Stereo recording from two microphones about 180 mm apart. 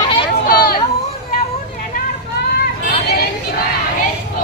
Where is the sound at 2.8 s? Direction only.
60° left (ahead or behind).